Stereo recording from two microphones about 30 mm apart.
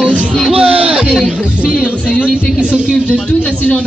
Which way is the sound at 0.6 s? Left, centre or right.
Right.